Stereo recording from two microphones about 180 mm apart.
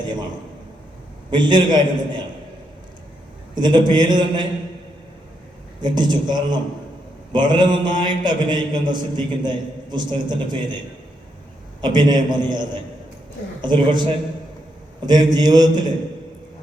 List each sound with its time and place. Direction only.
1.3 s a man's voice: 25° right (ahead or behind)
3.5 s a man's voice: 25° right (ahead or behind)
5.8 s a man's voice: 25° right (ahead or behind)
11.8 s a man's voice: 25° right (ahead or behind)